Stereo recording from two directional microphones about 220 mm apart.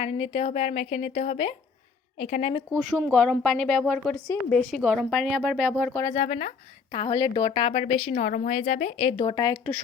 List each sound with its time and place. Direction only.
0.0 s a woman's voice: 25° left (ahead or behind)
2.7 s a woman's voice: 5° right (ahead or behind)
6.1 s speech: 30° left (ahead or behind)
6.9 s a woman's voice: 20° left (ahead or behind)